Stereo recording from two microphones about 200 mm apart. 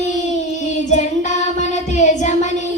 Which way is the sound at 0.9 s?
35° left (ahead or behind).